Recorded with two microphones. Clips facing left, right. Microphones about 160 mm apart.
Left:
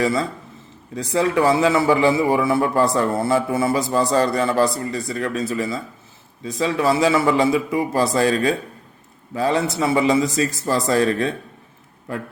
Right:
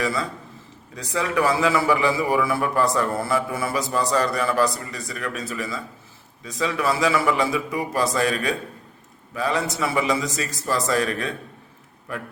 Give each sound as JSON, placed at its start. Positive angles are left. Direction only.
{"t": 0.0, "sound": "a man's voice", "side_deg": 30}